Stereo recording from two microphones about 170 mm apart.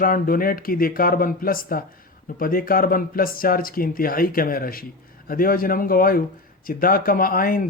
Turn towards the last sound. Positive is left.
turn(degrees=60)  # may be behind; listen again after turning